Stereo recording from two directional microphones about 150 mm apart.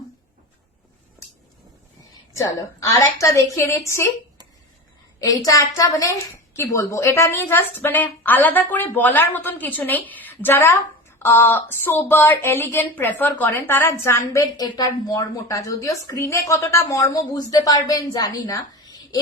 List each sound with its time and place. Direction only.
2.4 s speech: 20° left (ahead or behind)
5.2 s a woman's voice: 25° left (ahead or behind)